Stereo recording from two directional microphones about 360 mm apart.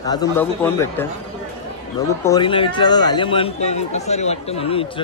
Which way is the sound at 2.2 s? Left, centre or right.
Centre.